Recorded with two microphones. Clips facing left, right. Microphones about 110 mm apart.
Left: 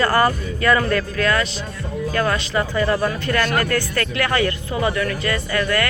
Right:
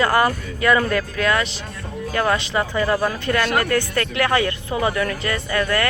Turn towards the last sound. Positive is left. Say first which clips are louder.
# even
turn(degrees=-25)  # may be behind; listen again after turning